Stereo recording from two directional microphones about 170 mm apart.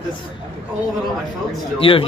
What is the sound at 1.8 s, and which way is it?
Speech, 30° left (ahead or behind).